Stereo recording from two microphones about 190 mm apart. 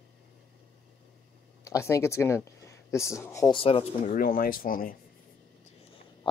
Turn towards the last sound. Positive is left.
turn(degrees=50)  # may be behind; listen again after turning